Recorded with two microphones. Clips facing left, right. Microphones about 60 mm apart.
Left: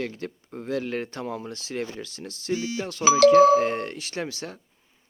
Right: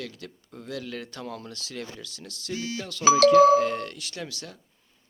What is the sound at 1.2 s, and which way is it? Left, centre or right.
Speech, centre.